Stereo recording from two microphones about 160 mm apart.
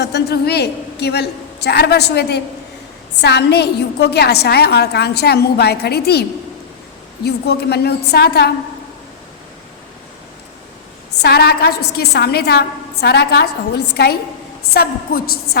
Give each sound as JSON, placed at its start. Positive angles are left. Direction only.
{"t": 0.0, "sound": "a woman's voice", "side_deg": 90}
{"t": 7.3, "sound": "a woman's voice", "side_deg": 90}
{"t": 11.2, "sound": "a woman's voice", "side_deg": 90}
{"t": 14.7, "sound": "a woman's voice", "side_deg": 70}